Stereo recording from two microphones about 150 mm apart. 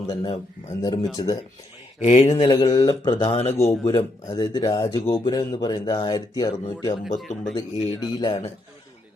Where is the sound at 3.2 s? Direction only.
50° left (ahead or behind).